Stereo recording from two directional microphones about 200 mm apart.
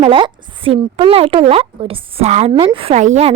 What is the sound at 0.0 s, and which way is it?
A woman's voice, 25° right (ahead or behind).